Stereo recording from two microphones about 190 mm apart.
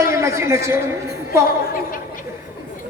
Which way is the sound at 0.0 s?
15° right (ahead or behind).